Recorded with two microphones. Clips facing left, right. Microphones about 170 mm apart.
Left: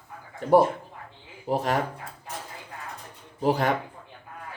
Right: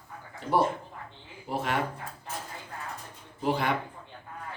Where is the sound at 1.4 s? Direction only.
40° left (ahead or behind).